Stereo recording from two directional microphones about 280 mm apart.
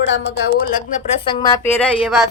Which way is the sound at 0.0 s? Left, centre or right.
Left.